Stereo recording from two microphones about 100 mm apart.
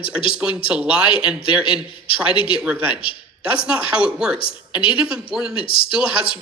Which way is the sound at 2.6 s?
10° right (ahead or behind).